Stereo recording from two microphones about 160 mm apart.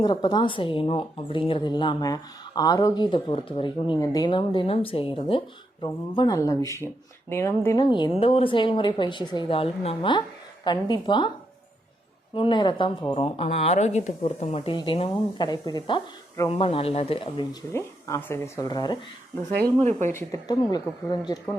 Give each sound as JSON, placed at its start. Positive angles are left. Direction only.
{"t": 0.0, "sound": "a woman's voice", "side_deg": 30}
{"t": 8.2, "sound": "speech", "side_deg": 35}
{"t": 12.3, "sound": "a woman's voice", "side_deg": 30}
{"t": 16.5, "sound": "a woman's voice", "side_deg": 35}
{"t": 17.7, "sound": "speech", "side_deg": 15}
{"t": 19.8, "sound": "speech", "side_deg": -45}
{"t": 20.1, "sound": "speech", "side_deg": 20}